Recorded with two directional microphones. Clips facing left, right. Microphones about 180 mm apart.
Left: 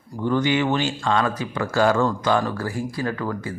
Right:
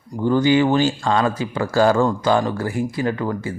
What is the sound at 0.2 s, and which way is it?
Speech, 30° right (ahead or behind).